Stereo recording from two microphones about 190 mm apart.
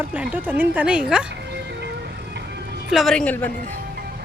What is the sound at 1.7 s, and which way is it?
Vehicle, 65° right (ahead or behind).